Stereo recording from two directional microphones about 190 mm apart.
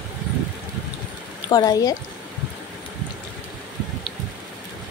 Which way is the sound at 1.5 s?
20° left (ahead or behind).